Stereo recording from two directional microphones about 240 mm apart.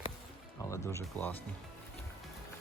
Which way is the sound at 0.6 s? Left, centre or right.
Centre.